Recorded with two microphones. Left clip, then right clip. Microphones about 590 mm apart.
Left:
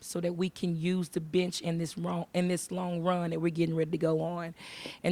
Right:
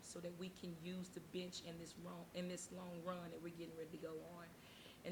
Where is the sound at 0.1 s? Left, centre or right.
Left.